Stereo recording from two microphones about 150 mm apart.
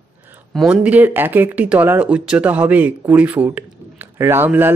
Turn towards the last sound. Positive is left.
turn(degrees=-15)  # may be behind; listen again after turning